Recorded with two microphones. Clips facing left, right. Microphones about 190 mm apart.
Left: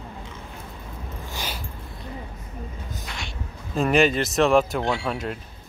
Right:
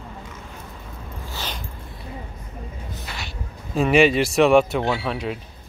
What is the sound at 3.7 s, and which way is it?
Speech, 5° right (ahead or behind).